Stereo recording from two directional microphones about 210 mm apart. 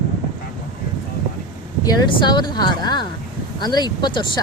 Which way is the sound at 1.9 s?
20° left (ahead or behind).